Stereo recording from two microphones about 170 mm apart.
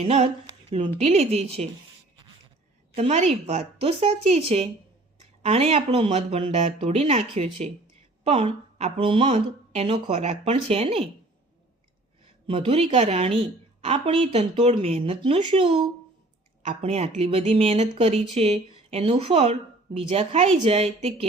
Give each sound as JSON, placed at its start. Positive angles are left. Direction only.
{"t": 0.0, "sound": "a woman's voice", "side_deg": -40}
{"t": 2.9, "sound": "a woman's voice", "side_deg": -40}
{"t": 12.5, "sound": "a woman's voice", "side_deg": -35}